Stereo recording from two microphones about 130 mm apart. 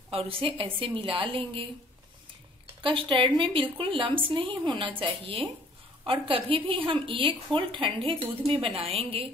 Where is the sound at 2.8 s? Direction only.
40° right (ahead or behind).